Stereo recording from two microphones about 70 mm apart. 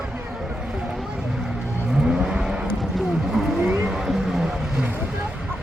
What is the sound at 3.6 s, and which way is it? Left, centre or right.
Vehicle, centre.